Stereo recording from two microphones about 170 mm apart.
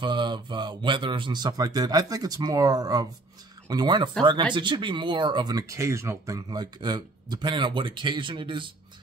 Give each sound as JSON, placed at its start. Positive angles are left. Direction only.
{"t": 0.0, "sound": "speech", "side_deg": -25}